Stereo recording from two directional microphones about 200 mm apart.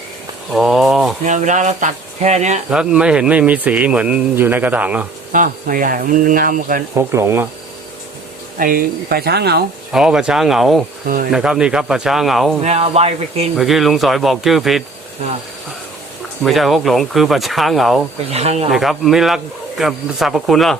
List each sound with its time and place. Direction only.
0.5 s speech: centre (ahead or behind)
1.2 s speech: 40° right (ahead or behind)
2.6 s speech: 5° right (ahead or behind)
5.3 s speech: 45° right (ahead or behind)
6.9 s speech: 15° right (ahead or behind)
8.5 s speech: 45° right (ahead or behind)
9.9 s speech: 5° right (ahead or behind)
11.0 s speech: 45° right (ahead or behind)
11.3 s speech: 5° right (ahead or behind)
12.6 s speech: 30° right (ahead or behind)
13.6 s speech: centre (ahead or behind)
16.4 s speech: centre (ahead or behind)
18.3 s speech: 30° right (ahead or behind)
18.7 s speech: centre (ahead or behind)